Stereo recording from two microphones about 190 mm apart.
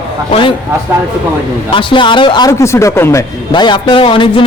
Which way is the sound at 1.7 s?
25° left (ahead or behind).